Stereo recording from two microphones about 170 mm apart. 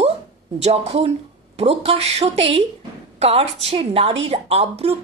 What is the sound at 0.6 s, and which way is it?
A woman's voice, 40° right (ahead or behind).